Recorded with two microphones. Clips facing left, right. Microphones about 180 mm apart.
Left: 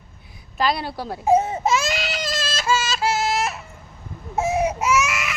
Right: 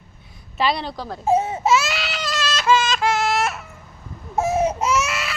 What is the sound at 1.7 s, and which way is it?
Baby cry, 45° left (ahead or behind).